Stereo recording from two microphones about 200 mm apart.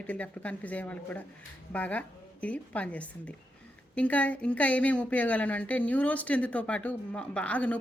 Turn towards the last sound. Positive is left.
turn(degrees=5)  # may be behind; listen again after turning